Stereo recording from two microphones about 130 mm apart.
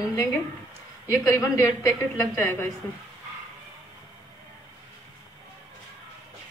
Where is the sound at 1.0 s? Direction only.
20° left (ahead or behind).